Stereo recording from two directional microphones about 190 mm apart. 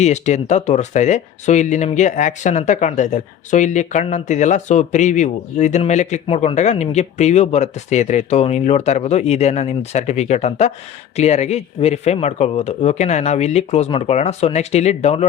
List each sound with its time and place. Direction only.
0.0 s speech: 35° left (ahead or behind)